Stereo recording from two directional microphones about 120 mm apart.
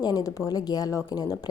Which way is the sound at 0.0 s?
30° left (ahead or behind).